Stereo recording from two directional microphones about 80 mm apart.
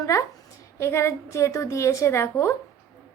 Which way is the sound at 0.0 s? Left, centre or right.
Left.